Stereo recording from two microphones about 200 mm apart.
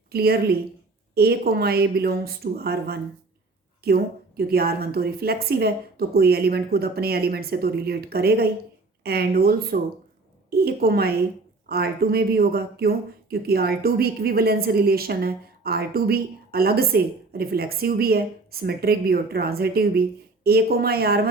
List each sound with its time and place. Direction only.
0.1 s speech: 50° right (ahead or behind)